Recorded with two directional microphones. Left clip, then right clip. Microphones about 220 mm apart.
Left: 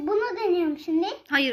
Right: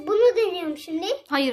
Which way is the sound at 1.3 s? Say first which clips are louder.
Left 1 dB; 20° right (ahead or behind).